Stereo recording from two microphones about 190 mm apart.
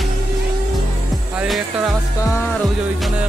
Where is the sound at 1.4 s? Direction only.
5° right (ahead or behind).